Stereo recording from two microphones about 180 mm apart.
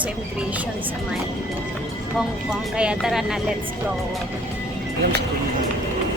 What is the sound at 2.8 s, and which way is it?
Speech, 5° right (ahead or behind).